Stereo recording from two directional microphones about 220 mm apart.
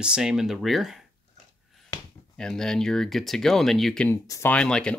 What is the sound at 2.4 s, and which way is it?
Speech, centre (ahead or behind).